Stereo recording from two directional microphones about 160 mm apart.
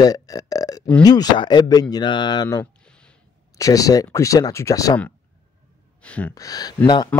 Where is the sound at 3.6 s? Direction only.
20° left (ahead or behind).